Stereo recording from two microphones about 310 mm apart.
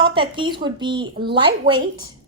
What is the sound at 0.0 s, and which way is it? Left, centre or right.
A woman's voice, centre.